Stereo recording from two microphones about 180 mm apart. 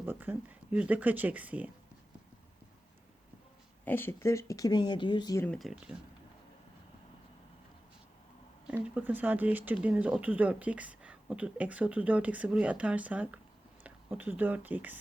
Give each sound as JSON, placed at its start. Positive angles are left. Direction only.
{"t": 0.0, "sound": "speech", "side_deg": -10}
{"t": 3.8, "sound": "speech", "side_deg": 10}
{"t": 5.5, "sound": "speech", "side_deg": 0}
{"t": 8.6, "sound": "speech", "side_deg": -5}